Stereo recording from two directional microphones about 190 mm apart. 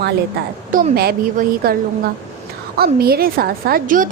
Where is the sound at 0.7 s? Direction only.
45° right (ahead or behind).